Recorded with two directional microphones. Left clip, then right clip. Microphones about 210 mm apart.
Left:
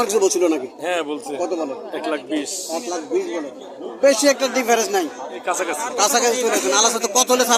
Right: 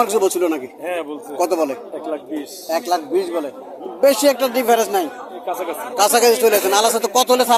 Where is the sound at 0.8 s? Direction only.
25° left (ahead or behind).